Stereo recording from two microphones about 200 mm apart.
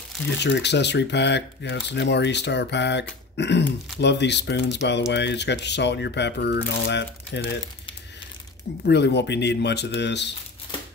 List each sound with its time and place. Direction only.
0.4 s speech: 60° left (ahead or behind)
8.8 s speech: 55° left (ahead or behind)